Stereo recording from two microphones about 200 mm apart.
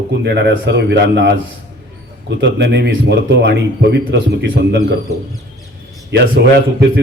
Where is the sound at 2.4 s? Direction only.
60° right (ahead or behind).